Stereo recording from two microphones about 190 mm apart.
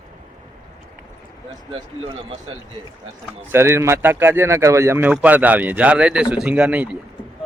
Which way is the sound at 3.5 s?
15° right (ahead or behind).